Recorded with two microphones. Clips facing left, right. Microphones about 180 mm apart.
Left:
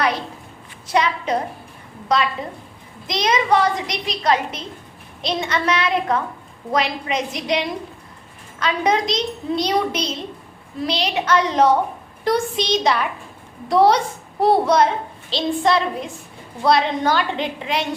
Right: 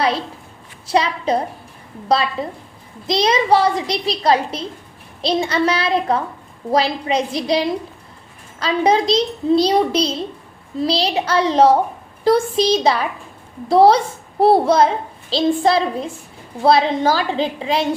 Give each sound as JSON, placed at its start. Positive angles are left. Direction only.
{"t": 0.9, "sound": "a child's voice", "side_deg": -30}